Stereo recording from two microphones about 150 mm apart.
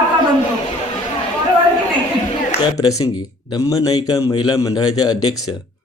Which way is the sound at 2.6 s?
25° left (ahead or behind).